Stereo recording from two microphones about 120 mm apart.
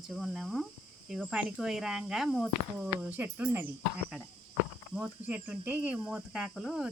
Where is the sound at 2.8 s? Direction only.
15° right (ahead or behind).